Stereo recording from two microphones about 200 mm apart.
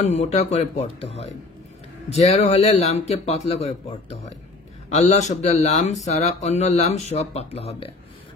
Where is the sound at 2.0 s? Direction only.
30° left (ahead or behind).